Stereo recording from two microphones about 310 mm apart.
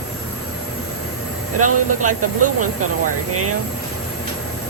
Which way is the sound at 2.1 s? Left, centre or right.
Right.